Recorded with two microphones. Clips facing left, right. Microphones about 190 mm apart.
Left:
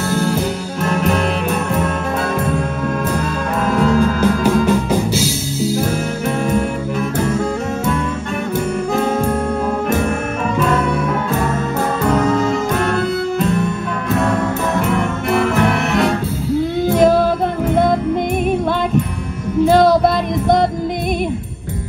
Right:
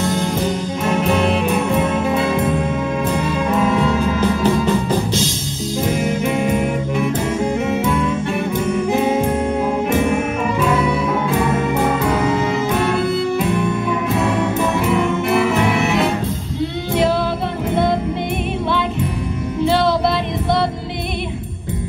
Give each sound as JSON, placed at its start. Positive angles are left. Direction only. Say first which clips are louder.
{"t": 0.8, "sound": "music", "louder": "even", "side_deg": 0}
{"t": 3.6, "sound": "music", "louder": "left 2 dB", "side_deg": 0}
{"t": 6.4, "sound": "music", "louder": "even", "side_deg": -15}
{"t": 12.1, "sound": "music", "louder": "left 2 dB", "side_deg": -10}
{"t": 14.9, "sound": "music", "louder": "right 1 dB", "side_deg": -5}
{"t": 16.9, "sound": "music", "louder": "left 5 dB", "side_deg": 45}
{"t": 19.6, "sound": "music", "louder": "left 5 dB", "side_deg": 45}